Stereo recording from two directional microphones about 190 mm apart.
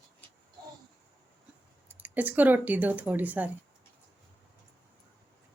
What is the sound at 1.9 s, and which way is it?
Speech, 10° right (ahead or behind).